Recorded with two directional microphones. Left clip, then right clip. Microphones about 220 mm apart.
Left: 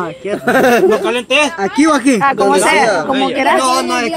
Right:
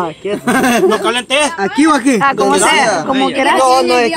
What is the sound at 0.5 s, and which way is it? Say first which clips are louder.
Speech: left 2 dB; 20° right (ahead or behind).